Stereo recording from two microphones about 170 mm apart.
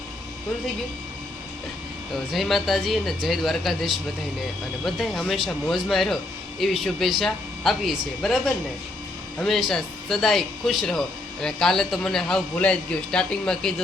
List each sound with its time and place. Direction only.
2.1 s speech: centre (ahead or behind)
4.9 s speech: centre (ahead or behind)